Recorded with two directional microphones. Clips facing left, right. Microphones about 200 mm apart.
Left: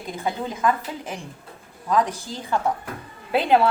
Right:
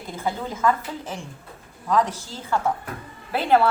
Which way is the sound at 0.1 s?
15° left (ahead or behind).